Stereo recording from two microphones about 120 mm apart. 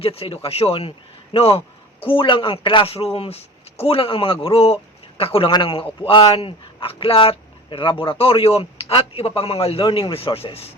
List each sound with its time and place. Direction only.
0.0 s speech: 50° left (ahead or behind)